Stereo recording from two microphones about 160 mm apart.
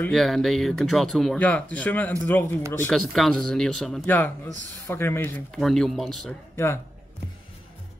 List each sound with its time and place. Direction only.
0.0 s speech: centre (ahead or behind)
5.5 s speech: centre (ahead or behind)
6.5 s speech: 15° left (ahead or behind)